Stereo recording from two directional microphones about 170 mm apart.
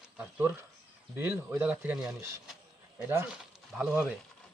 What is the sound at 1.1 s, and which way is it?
Speech, 10° right (ahead or behind).